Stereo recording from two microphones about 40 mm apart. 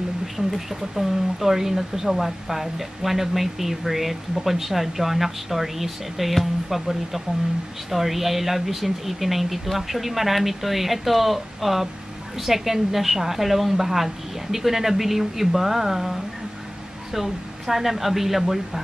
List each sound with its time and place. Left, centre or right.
0.5 s speech: centre